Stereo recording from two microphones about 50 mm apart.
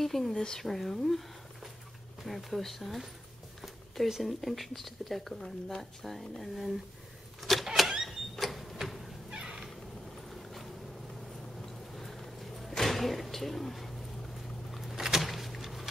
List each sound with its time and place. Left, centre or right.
0.0 s speech: centre
7.4 s a sound: centre
9.3 s cat: centre
10.3 s boat: centre
11.6 s a sound: centre
14.7 s vehicle: centre